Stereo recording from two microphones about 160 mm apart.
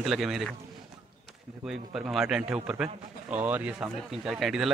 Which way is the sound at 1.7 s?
5° right (ahead or behind).